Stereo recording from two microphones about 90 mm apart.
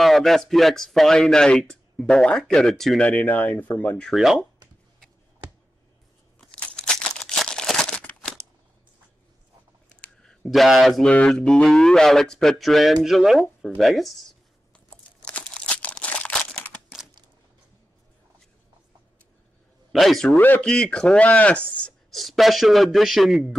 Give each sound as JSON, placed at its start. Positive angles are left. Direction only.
{"t": 0.0, "sound": "speech", "side_deg": 0}
{"t": 3.0, "sound": "speech", "side_deg": 15}
{"t": 4.1, "sound": "speech", "side_deg": -5}
{"t": 6.4, "sound": "crumpling", "side_deg": 10}
{"t": 10.2, "sound": "speech", "side_deg": 0}
{"t": 11.1, "sound": "speech", "side_deg": 10}
{"t": 14.9, "sound": "crumpling", "side_deg": 15}
{"t": 19.9, "sound": "a man's voice", "side_deg": 0}
{"t": 20.3, "sound": "speech", "side_deg": 25}
{"t": 20.6, "sound": "speech", "side_deg": 10}
{"t": 22.1, "sound": "speech", "side_deg": 0}